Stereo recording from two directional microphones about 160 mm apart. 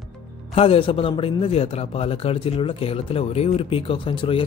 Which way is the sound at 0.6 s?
35° left (ahead or behind).